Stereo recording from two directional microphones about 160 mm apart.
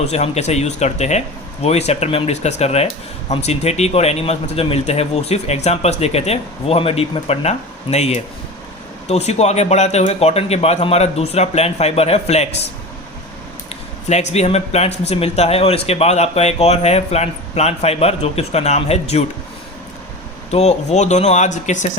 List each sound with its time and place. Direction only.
0.0 s speech: 40° left (ahead or behind)
13.7 s speech: 45° left (ahead or behind)
20.5 s speech: 45° left (ahead or behind)